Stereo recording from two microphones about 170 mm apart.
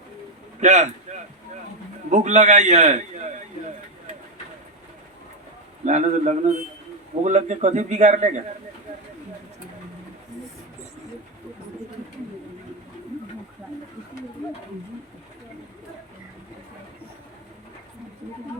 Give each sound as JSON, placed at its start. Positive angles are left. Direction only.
{"t": 0.6, "sound": "a man's voice", "side_deg": -45}
{"t": 2.0, "sound": "a man's voice", "side_deg": -45}
{"t": 5.8, "sound": "a man's voice", "side_deg": -45}